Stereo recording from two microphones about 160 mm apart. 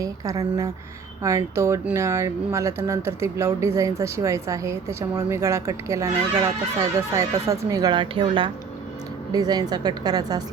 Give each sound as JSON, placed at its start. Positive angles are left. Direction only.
{"t": 0.0, "sound": "speech", "side_deg": -20}